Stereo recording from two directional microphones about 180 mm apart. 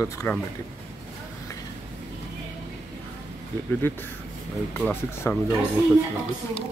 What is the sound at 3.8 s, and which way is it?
Speech, 10° left (ahead or behind).